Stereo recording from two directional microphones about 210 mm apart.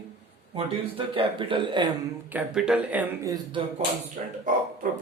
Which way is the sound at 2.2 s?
5° right (ahead or behind).